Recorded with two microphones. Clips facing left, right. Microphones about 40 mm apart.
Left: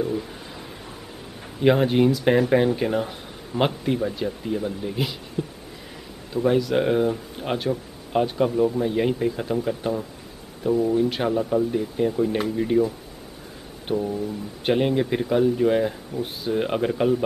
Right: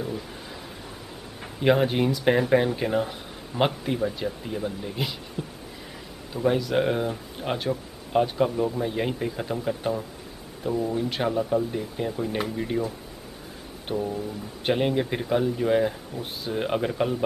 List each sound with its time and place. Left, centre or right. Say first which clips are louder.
1.6 s speech: left 3 dB; centre
5.4 s a sound: left 6 dB; centre
6.3 s speech: left 3 dB; centre
13.8 s speech: left 3 dB; centre